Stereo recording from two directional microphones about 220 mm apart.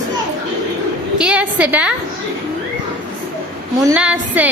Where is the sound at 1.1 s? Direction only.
5° right (ahead or behind).